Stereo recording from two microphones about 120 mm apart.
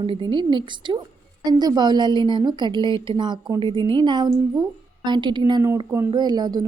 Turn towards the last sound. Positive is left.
turn(degrees=-35)  # may be behind; listen again after turning